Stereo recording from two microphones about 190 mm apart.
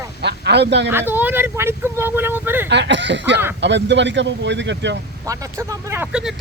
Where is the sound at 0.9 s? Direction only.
10° right (ahead or behind).